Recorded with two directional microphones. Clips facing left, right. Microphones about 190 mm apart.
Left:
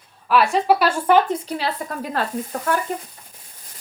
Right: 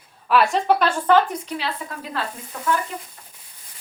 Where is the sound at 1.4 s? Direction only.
40° left (ahead or behind).